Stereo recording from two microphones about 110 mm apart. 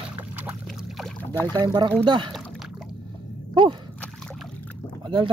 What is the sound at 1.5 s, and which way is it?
Speech, 35° right (ahead or behind).